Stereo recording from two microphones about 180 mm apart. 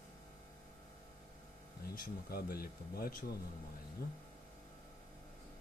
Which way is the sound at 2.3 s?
55° left (ahead or behind).